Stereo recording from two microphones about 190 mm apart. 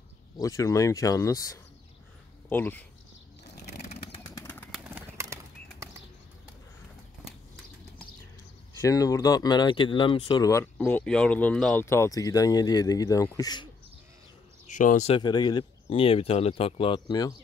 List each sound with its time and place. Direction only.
0.4 s speech: 15° left (ahead or behind)
3.4 s bird flight: 60° left (ahead or behind)
4.0 s vehicle: 30° left (ahead or behind)
4.3 s bird: 10° left (ahead or behind)
4.9 s bird: 15° right (ahead or behind)
8.8 s speech: 20° left (ahead or behind)
14.7 s speech: 40° left (ahead or behind); by 17.3 s 25° left (ahead or behind)